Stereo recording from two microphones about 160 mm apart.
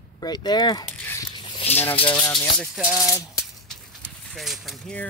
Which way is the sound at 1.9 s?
30° left (ahead or behind).